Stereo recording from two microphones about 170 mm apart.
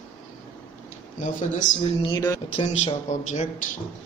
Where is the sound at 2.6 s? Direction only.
40° left (ahead or behind).